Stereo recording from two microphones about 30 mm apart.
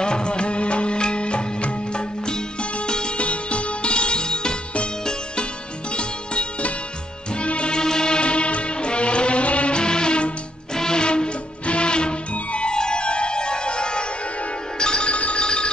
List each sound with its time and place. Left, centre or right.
0.0 s music: left
3.2 s music: left
7.7 s music: left
9.8 s music: left
14.8 s telephone bell ringing: left
15.0 s telephone bell ringing: left
15.3 s telephone: left